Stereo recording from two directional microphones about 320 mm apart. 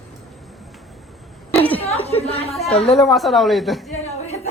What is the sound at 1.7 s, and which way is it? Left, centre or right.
Speech, centre.